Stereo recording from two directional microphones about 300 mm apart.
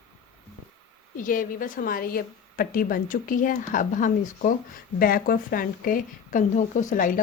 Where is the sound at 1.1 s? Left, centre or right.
Left.